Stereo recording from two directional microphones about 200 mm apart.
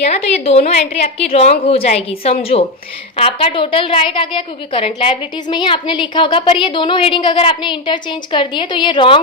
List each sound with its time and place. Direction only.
0.0 s a woman's voice: 30° left (ahead or behind)